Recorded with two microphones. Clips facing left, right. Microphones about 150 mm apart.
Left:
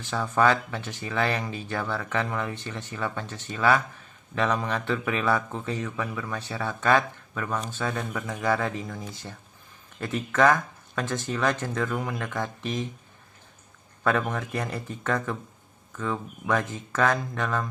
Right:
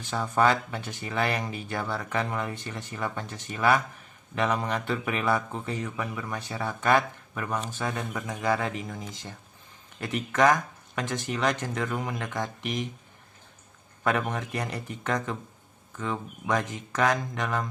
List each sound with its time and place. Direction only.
0.0 s speech: 15° right (ahead or behind)
0.3 s speech: 25° right (ahead or behind)
14.1 s speech: 20° right (ahead or behind)